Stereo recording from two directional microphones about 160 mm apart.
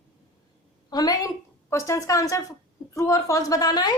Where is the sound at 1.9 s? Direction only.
20° left (ahead or behind).